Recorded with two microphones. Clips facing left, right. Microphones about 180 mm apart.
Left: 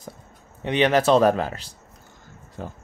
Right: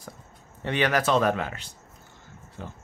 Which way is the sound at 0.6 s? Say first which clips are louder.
Left 5 dB; 20° left (ahead or behind).